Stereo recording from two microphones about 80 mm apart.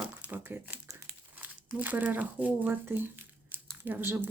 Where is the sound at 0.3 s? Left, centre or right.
Right.